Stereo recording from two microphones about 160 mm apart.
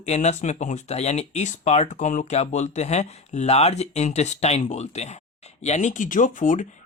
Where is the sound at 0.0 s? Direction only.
45° left (ahead or behind).